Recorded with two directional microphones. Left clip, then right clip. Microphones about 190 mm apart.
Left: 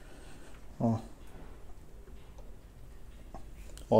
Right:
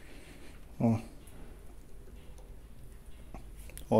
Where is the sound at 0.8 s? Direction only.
20° right (ahead or behind).